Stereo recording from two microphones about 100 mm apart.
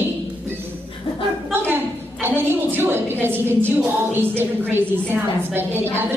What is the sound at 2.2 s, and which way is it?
A woman's voice, 25° right (ahead or behind).